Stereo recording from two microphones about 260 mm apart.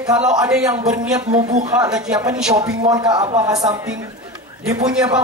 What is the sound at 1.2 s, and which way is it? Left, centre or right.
Speech, right.